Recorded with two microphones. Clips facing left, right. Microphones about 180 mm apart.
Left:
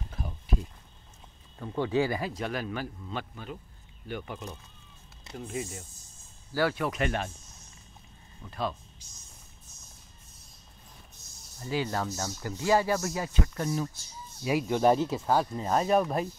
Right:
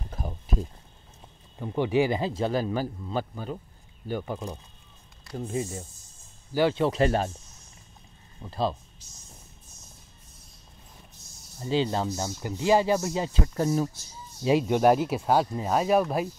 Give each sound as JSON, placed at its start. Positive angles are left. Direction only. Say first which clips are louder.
{"t": 0.1, "sound": "a sound", "louder": "right 2 dB", "side_deg": -40}
{"t": 1.6, "sound": "speech", "louder": "right 3 dB", "side_deg": -15}
{"t": 8.4, "sound": "speech", "louder": "right 5 dB", "side_deg": -30}
{"t": 11.6, "sound": "speech", "louder": "right 5 dB", "side_deg": -25}
{"t": 14.4, "sound": "speech", "louder": "right 5 dB", "side_deg": -25}
{"t": 14.8, "sound": "speech", "louder": "right 3 dB", "side_deg": -10}